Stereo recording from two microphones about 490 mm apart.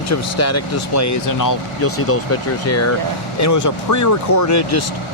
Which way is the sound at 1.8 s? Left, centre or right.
Left.